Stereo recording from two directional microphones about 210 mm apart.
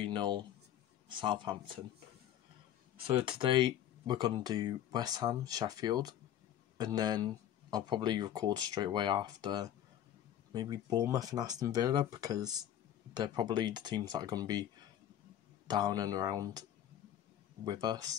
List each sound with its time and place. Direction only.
0.0 s speech: 20° right (ahead or behind)
3.1 s speech: 25° right (ahead or behind)
17.6 s speech: 20° right (ahead or behind)